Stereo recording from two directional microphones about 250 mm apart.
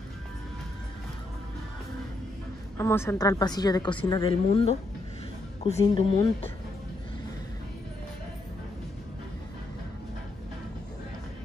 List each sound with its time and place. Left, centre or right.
2.8 s a woman's voice: centre